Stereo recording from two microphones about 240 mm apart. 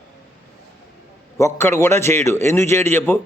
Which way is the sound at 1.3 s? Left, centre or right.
Centre.